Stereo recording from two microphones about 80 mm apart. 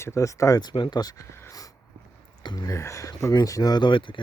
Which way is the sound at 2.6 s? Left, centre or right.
Left.